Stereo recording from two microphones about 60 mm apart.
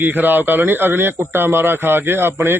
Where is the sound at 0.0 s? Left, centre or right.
Right.